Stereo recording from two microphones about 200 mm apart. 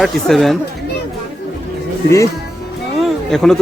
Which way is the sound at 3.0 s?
Centre (ahead or behind).